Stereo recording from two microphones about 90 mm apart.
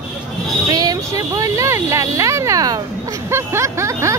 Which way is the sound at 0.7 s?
45° right (ahead or behind).